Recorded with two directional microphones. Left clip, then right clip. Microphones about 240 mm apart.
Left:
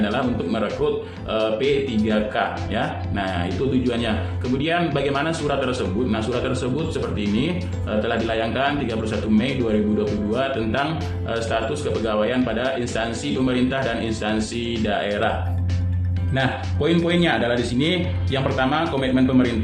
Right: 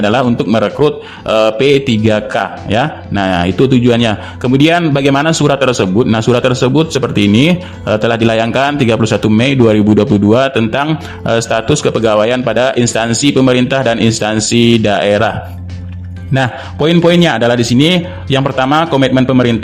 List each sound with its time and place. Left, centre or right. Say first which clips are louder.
0.0 s a man's voice: right 11 dB; right
16.3 s a man's voice: right 8 dB; right